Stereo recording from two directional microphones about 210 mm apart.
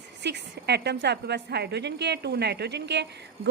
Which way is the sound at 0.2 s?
55° right (ahead or behind).